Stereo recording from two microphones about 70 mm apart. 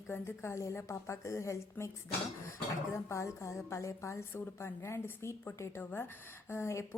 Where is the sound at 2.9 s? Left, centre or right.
Left.